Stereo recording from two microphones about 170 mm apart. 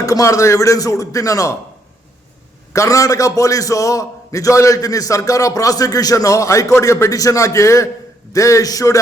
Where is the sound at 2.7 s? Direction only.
20° left (ahead or behind).